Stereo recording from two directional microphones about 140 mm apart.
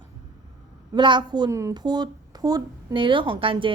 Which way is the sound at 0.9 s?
35° right (ahead or behind).